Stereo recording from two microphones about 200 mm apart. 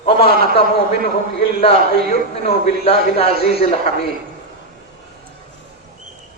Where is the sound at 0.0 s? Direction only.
30° left (ahead or behind).